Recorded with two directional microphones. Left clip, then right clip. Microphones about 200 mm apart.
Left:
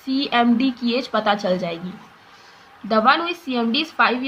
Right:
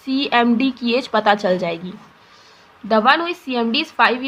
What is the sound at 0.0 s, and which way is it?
A woman's voice, 25° right (ahead or behind).